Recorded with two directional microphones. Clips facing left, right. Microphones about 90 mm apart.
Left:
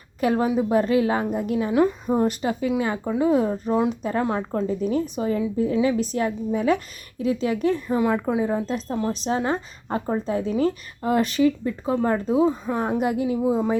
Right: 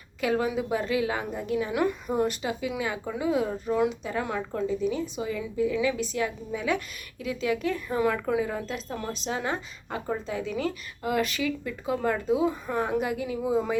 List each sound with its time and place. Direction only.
0.2 s speech: 35° left (ahead or behind)
3.8 s speech: 40° left (ahead or behind)
7.9 s a woman's voice: 20° left (ahead or behind)
9.2 s speech: 35° left (ahead or behind)